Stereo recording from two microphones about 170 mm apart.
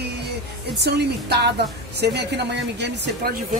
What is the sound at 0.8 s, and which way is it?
Speech, 75° right (ahead or behind).